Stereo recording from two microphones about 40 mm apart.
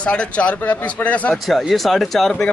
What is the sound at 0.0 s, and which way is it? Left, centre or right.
A man's voice, left.